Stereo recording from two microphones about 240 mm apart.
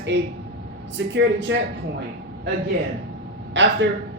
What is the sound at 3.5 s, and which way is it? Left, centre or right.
Speech, right.